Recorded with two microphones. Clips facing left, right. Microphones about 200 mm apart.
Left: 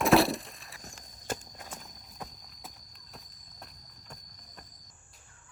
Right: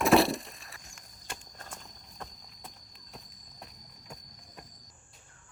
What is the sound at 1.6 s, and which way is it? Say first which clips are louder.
Clip-clop: left 1 dB; 5° left (ahead or behind).